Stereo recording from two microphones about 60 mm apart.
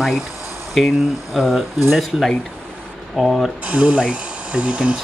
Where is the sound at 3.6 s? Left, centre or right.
Right.